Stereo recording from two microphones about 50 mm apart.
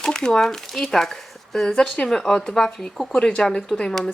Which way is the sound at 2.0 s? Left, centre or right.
Centre.